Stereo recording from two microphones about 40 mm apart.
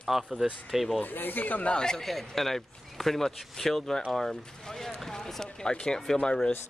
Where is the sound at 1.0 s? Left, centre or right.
Left.